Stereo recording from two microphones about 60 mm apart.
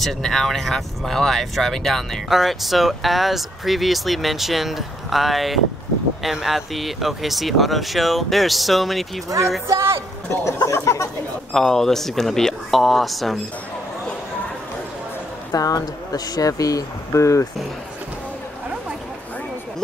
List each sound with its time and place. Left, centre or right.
0.0 s speech: centre
9.7 s a man's voice: right
10.3 s speech: left
11.5 s speech: centre
15.5 s speech: left